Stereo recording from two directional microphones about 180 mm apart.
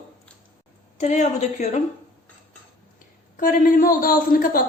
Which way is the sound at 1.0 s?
40° left (ahead or behind).